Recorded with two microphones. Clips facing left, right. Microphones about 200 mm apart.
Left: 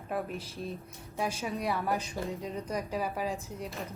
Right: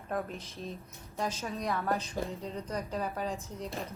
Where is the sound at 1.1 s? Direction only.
10° left (ahead or behind).